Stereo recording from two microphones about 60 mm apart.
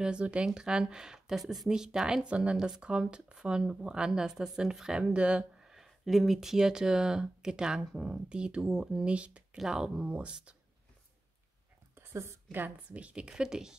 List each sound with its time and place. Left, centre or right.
0.0 s speech: centre
5.8 s speech: centre; by 9.6 s right
9.6 s speech: centre
10.0 s speech: centre
11.9 s a sound: right
12.9 s speech: centre